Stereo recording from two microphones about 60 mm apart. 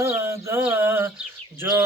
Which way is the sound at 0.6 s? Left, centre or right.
Right.